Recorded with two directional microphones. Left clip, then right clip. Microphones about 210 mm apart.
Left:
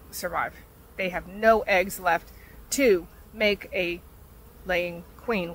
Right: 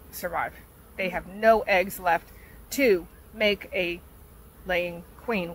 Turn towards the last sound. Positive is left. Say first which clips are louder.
# left 1 dB
turn(degrees=5)  # may be behind; listen again after turning